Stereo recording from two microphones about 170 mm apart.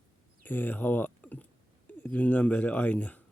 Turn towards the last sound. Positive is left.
turn(degrees=10)  # may be behind; listen again after turning